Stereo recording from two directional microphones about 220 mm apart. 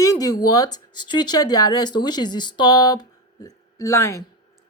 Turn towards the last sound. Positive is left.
turn(degrees=10)  # may be behind; listen again after turning